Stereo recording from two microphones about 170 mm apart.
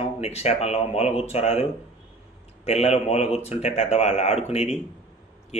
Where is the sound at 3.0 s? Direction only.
35° left (ahead or behind).